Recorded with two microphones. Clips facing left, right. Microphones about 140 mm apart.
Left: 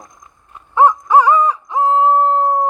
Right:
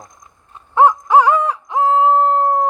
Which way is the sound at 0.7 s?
70° right (ahead or behind).